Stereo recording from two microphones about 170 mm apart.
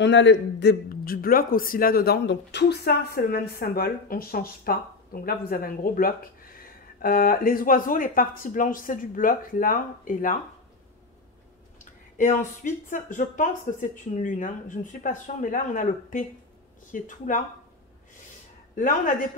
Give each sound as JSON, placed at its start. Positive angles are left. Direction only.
{"t": 0.0, "sound": "speech", "side_deg": 90}
{"t": 11.8, "sound": "a sound", "side_deg": 45}
{"t": 12.9, "sound": "speech", "side_deg": 50}
{"t": 18.8, "sound": "speech", "side_deg": 50}